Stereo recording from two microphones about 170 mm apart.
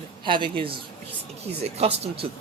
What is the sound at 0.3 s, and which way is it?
Speech, 30° right (ahead or behind).